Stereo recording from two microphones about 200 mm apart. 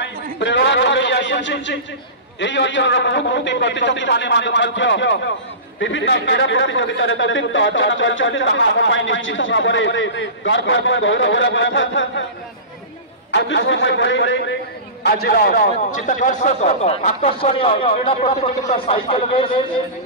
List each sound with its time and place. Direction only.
0.0 s a sound: 60° left (ahead or behind)
2.4 s a man's voice: 65° left (ahead or behind)
13.3 s a man's voice: 65° left (ahead or behind)
15.0 s a man's voice: 50° left (ahead or behind); by 19.6 s 25° left (ahead or behind)